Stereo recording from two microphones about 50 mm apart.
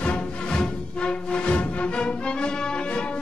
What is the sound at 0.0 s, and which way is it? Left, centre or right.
Music, left.